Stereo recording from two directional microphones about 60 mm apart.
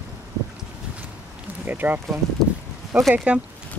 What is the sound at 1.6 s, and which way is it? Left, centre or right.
Speech, right.